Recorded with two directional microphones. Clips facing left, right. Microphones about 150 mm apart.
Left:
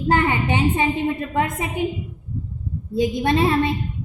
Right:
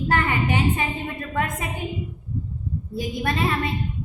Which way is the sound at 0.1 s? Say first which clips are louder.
Left 4 dB; 25° left (ahead or behind).